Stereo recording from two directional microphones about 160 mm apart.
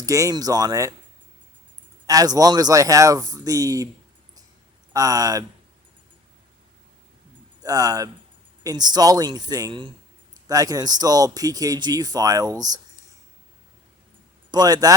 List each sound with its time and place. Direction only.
0.0 s speech: 20° right (ahead or behind)
2.0 s speech: 25° right (ahead or behind)
4.9 s speech: 20° right (ahead or behind)
7.6 s speech: 20° right (ahead or behind)
14.5 s speech: 25° right (ahead or behind)